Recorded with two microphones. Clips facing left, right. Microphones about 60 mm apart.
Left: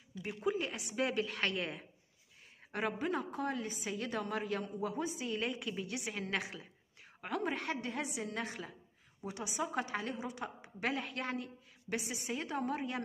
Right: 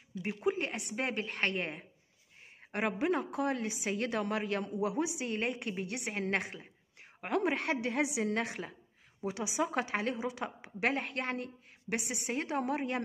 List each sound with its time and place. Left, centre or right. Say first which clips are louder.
0.5 s a woman's voice: right 2 dB; right
0.9 s speech: left 3 dB; right
2.7 s a woman's voice: right 4 dB; right
5.2 s a woman's voice: right 3 dB; right
9.3 s a woman's voice: right 4 dB; right